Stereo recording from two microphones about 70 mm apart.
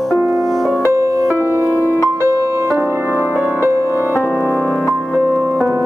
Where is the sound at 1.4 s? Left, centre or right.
Right.